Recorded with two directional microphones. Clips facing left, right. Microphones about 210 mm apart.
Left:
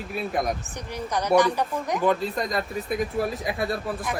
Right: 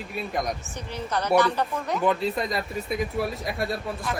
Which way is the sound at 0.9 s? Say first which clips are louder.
Left 1 dB; 15° left (ahead or behind).